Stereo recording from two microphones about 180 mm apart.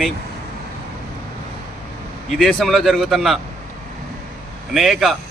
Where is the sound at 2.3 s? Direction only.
Centre (ahead or behind).